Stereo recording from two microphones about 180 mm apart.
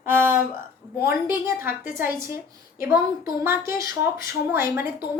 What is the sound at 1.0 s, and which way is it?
Speech, 15° right (ahead or behind).